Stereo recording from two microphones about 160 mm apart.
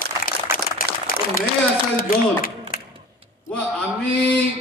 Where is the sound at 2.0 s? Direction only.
65° left (ahead or behind).